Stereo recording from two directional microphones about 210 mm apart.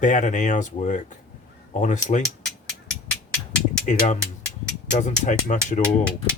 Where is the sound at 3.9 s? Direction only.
35° left (ahead or behind).